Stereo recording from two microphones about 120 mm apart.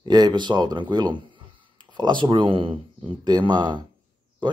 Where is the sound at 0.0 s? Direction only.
35° right (ahead or behind).